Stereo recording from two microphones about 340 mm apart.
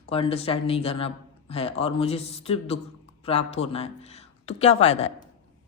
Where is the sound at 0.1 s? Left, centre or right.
Centre.